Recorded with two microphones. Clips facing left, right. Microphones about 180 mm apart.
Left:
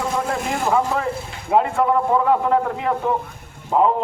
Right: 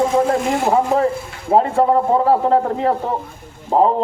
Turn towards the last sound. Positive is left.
turn(degrees=-35)  # may be behind; listen again after turning